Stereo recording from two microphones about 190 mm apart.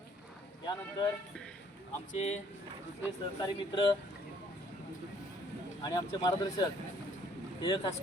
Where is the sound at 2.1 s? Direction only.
35° left (ahead or behind).